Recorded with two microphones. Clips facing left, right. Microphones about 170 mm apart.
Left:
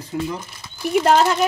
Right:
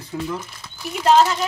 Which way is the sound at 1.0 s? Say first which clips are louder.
Right 2 dB; 55° left (ahead or behind).